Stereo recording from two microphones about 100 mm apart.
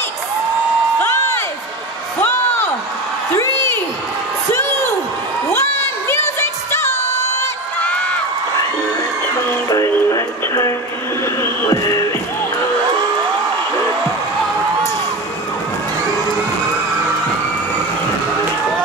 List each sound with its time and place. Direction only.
1.0 s crowd: 25° left (ahead or behind)
2.1 s a sound: 25° left (ahead or behind)
4.5 s whoop: 25° left (ahead or behind)
5.5 s a sound: 25° left (ahead or behind)
7.8 s run: 10° left (ahead or behind)
9.8 s music: 30° left (ahead or behind)